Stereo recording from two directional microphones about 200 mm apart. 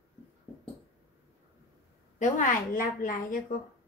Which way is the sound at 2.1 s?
40° left (ahead or behind).